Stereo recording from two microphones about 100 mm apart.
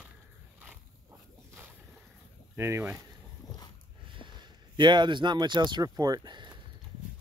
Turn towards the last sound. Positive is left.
turn(degrees=-45)  # may be behind; listen again after turning